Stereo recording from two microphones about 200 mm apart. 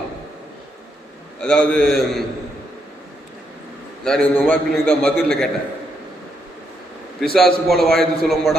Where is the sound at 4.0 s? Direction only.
5° left (ahead or behind).